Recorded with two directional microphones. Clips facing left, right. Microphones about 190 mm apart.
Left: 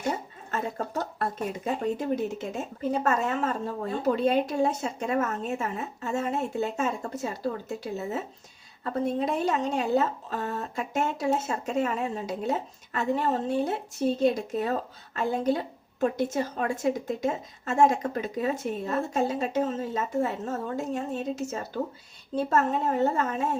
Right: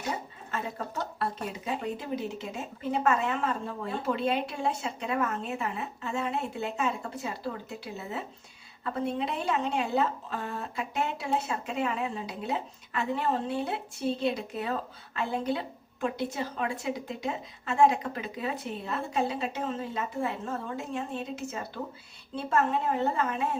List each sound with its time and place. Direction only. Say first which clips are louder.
1.2 s a woman's voice: left 3 dB; 45° left (ahead or behind)
8.8 s a woman's voice: left 3 dB; 40° left (ahead or behind)